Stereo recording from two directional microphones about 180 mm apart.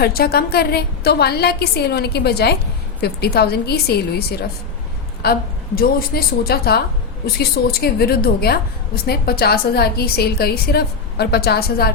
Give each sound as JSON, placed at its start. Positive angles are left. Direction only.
{"t": 0.0, "sound": "a woman's voice", "side_deg": 60}